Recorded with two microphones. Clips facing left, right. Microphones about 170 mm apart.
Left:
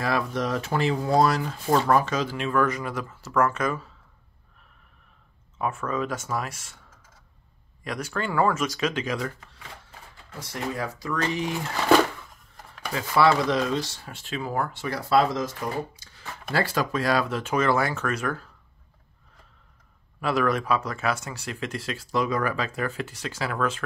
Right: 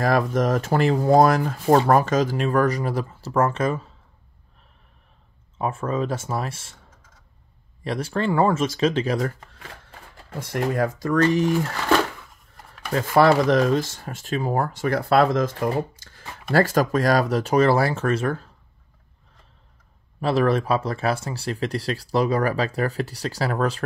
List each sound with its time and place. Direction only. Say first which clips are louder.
0.0 s speech: right 6 dB; 45° right (ahead or behind); by 3.8 s 25° right (ahead or behind)
5.6 s speech: right 3 dB; 30° right (ahead or behind)
7.8 s speech: right 6 dB; 30° right (ahead or behind); by 11.4 s 50° right (ahead or behind)
12.9 s speech: right 4 dB; 50° right (ahead or behind); by 18.4 s 30° right (ahead or behind)
20.2 s speech: right 4 dB; 30° right (ahead or behind)